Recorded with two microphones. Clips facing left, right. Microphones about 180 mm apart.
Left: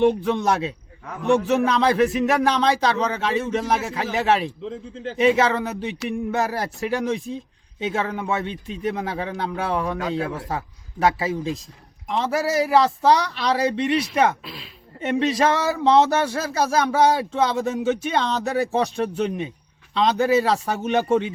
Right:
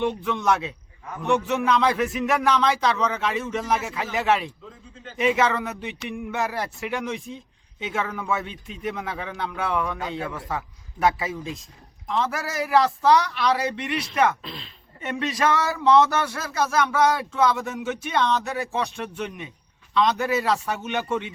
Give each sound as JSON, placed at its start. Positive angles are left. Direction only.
{"t": 0.0, "sound": "speech", "side_deg": 35}
{"t": 14.4, "sound": "speech", "side_deg": 5}
{"t": 15.0, "sound": "speech", "side_deg": 30}